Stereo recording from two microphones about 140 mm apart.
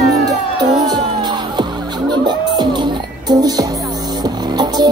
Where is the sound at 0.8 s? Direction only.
30° right (ahead or behind).